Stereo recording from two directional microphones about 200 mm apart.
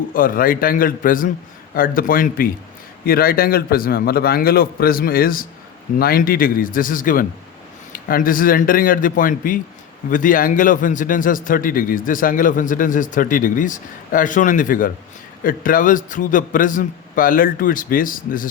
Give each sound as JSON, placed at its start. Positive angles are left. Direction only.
{"t": 0.1, "sound": "a man's voice", "side_deg": 45}